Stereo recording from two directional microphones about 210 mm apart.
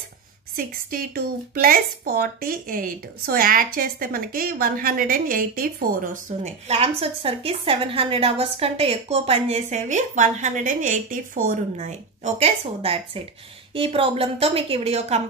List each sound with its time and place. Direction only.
0.6 s a woman's voice: 45° right (ahead or behind)